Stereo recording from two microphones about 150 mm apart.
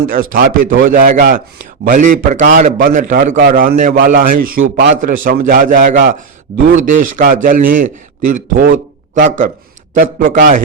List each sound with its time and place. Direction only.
0.1 s a man's voice: 70° right (ahead or behind)